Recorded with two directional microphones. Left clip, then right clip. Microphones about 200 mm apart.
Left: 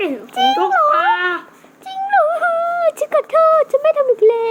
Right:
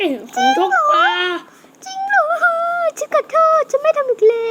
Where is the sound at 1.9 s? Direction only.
10° right (ahead or behind).